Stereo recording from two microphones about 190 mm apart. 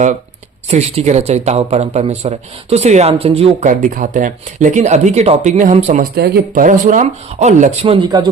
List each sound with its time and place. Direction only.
0.7 s a man's voice: 35° right (ahead or behind)
6.1 s a man's voice: 55° right (ahead or behind); by 8.3 s 25° right (ahead or behind)